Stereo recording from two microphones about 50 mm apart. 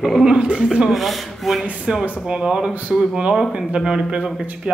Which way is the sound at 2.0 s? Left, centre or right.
Centre.